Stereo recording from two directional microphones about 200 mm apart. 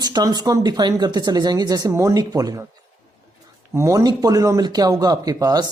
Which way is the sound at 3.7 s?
15° right (ahead or behind).